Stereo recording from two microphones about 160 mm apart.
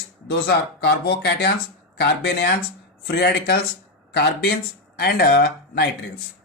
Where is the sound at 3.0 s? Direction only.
80° left.